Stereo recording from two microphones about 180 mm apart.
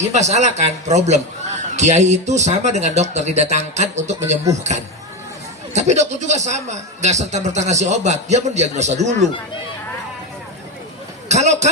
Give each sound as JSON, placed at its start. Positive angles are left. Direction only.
{"t": 0.0, "sound": "a man's voice", "side_deg": -40}
{"t": 5.7, "sound": "a man's voice", "side_deg": -40}
{"t": 11.3, "sound": "a man's voice", "side_deg": -40}